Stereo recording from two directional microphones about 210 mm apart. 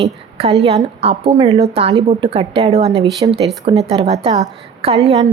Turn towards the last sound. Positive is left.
turn(degrees=-30)  # may be behind; listen again after turning